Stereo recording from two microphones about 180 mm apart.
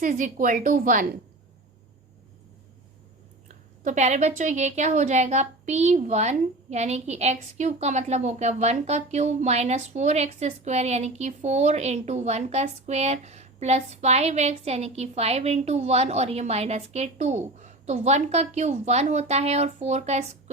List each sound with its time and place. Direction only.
0.0 s a woman's voice: 45° right (ahead or behind)
3.8 s a woman's voice: 40° right (ahead or behind)